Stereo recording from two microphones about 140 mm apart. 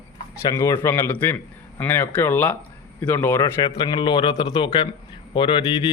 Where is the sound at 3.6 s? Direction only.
25° left (ahead or behind).